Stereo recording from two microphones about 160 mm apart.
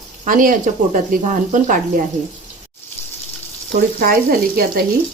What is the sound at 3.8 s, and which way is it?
Speech, 65° right (ahead or behind).